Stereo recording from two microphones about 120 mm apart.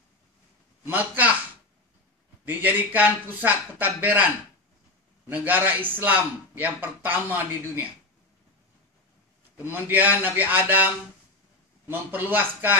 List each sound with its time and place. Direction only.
0.8 s speech: 15° right (ahead or behind)
2.4 s speech: 15° right (ahead or behind)
5.3 s speech: 15° right (ahead or behind)
9.6 s speech: 15° right (ahead or behind)
11.9 s speech: 15° right (ahead or behind)